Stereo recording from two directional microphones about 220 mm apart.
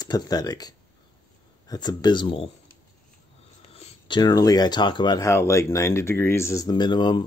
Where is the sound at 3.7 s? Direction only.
25° left (ahead or behind).